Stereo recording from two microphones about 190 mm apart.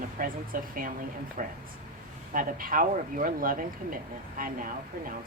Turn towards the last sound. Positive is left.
turn(degrees=-45)  # may be behind; listen again after turning